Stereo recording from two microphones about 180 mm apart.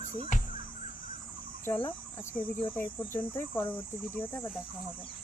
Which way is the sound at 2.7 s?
10° left (ahead or behind).